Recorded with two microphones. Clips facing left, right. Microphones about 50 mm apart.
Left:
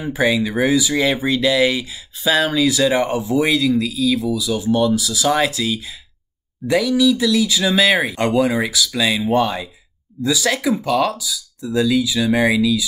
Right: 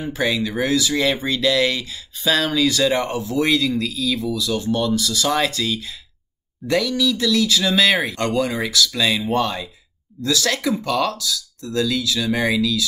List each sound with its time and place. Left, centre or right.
0.0 s speech: centre